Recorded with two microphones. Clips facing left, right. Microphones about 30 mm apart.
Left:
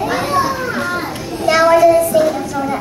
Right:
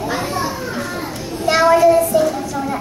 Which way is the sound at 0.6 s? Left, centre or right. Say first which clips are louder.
Left 5 dB; left.